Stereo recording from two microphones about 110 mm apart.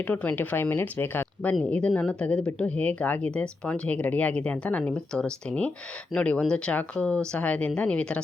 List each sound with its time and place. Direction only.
0.1 s speech: 15° left (ahead or behind)